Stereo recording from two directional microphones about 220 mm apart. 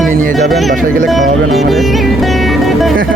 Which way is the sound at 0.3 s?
Centre (ahead or behind).